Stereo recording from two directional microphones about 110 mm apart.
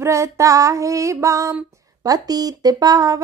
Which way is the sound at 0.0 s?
25° right (ahead or behind).